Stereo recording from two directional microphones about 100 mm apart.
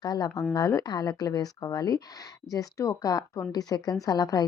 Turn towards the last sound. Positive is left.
turn(degrees=40)  # may be behind; listen again after turning